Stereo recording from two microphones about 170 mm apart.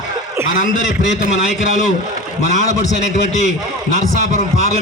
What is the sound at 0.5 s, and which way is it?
A man's voice, 45° left (ahead or behind).